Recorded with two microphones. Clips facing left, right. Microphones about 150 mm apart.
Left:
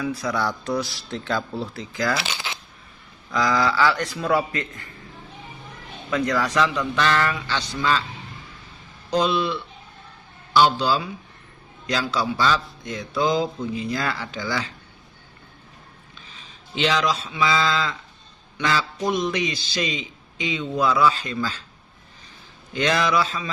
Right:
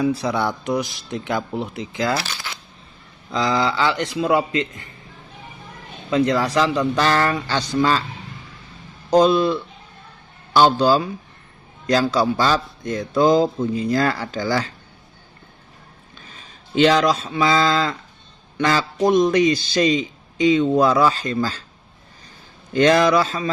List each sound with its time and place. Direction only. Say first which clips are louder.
0.0 s speech: right 4 dB; 30° right (ahead or behind)
2.2 s coin: left 1 dB; 15° left (ahead or behind)
3.2 s speech: right 1 dB; 25° right (ahead or behind)
6.1 s speech: right 5 dB; 25° right (ahead or behind); by 8.0 s 45° right (ahead or behind)
9.0 s a man's voice: right 7 dB; 40° right (ahead or behind)
16.1 s a man's voice: right 4 dB; 50° right (ahead or behind)
22.7 s a man's voice: right 7 dB; 45° right (ahead or behind)